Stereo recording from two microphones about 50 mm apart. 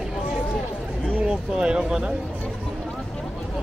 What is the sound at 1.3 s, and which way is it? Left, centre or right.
Speech, centre.